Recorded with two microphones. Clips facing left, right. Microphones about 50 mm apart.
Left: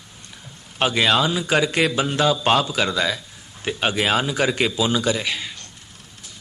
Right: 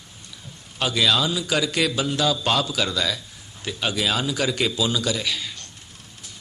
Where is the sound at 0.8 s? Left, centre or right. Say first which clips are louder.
Left 3 dB; left.